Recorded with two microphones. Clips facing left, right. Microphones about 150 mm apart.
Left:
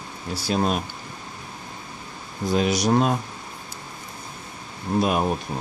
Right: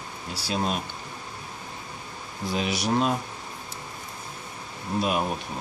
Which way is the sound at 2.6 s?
45° left (ahead or behind).